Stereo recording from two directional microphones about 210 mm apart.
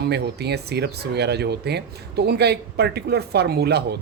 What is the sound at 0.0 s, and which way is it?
Speech, 50° right (ahead or behind).